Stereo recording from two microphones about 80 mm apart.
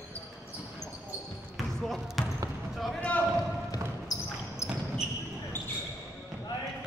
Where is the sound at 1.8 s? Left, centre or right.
Centre.